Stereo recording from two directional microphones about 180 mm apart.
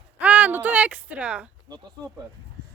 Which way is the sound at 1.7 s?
20° right (ahead or behind).